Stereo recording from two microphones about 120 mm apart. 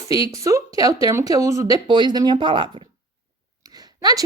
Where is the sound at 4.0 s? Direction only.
30° right (ahead or behind).